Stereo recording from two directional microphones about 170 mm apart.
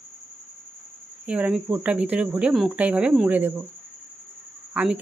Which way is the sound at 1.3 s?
5° right (ahead or behind).